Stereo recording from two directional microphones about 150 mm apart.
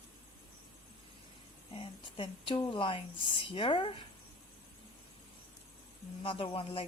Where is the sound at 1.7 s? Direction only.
35° left (ahead or behind).